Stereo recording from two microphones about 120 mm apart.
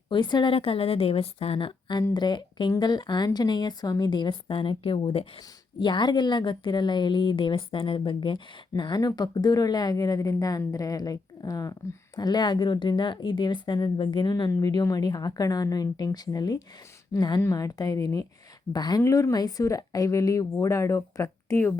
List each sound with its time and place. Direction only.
0.1 s a woman's voice: 40° left (ahead or behind)
0.5 s a woman's voice: 50° left (ahead or behind)
5.8 s a woman's voice: 40° left (ahead or behind); by 21.7 s 20° left (ahead or behind)